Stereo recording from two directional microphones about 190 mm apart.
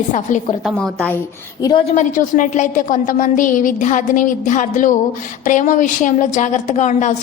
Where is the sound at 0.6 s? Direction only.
Centre (ahead or behind).